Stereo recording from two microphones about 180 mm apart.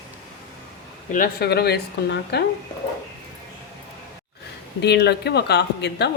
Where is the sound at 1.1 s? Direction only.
55° left (ahead or behind).